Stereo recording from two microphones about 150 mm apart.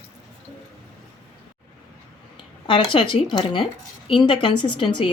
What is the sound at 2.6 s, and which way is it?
A woman's voice, 35° left (ahead or behind).